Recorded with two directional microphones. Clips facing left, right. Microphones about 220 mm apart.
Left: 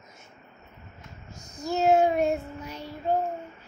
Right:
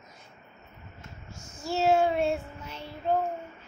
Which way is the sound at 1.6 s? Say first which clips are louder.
Left 2 dB; 15° left (ahead or behind).